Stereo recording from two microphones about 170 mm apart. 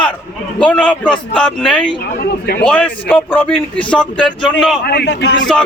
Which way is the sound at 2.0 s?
70° left (ahead or behind).